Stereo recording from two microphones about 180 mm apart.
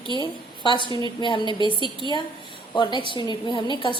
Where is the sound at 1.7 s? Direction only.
25° right (ahead or behind).